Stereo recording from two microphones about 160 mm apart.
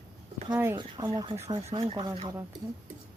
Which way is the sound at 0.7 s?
30° right (ahead or behind).